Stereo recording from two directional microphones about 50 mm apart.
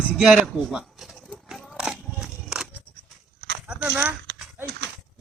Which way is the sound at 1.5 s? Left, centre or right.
Centre.